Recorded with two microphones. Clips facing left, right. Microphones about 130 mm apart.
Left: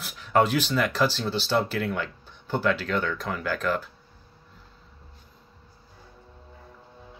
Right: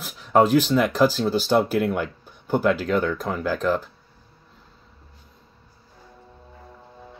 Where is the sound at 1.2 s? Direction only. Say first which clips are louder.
Right 6 dB; 50° right (ahead or behind).